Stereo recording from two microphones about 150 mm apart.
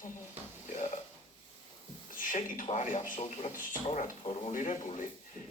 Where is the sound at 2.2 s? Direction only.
65° left (ahead or behind).